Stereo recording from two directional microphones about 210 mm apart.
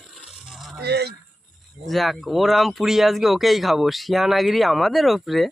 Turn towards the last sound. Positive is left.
turn(degrees=0)  # may be behind; listen again after turning